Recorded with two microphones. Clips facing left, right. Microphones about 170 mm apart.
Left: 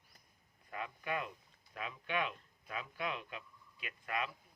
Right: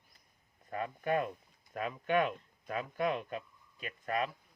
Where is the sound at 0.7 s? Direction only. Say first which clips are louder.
Right 7 dB; 45° right (ahead or behind).